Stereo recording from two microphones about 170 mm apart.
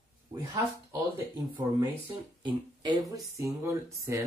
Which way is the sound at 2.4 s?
25° right (ahead or behind).